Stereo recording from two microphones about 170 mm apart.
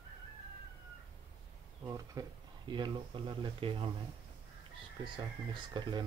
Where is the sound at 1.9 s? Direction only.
20° right (ahead or behind).